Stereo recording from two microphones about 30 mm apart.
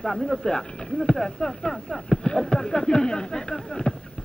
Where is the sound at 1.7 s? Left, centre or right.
Centre.